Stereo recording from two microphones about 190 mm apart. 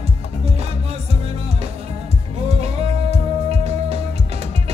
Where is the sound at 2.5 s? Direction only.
35° right (ahead or behind).